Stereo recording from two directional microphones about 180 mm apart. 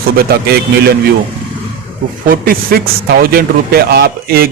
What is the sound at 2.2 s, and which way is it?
A man's voice, 50° right (ahead or behind).